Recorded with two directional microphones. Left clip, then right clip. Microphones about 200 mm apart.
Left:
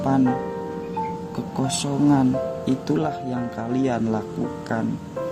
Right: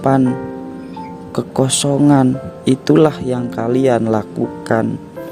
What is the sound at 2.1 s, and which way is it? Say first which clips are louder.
Speech: right 6 dB; 50° right (ahead or behind).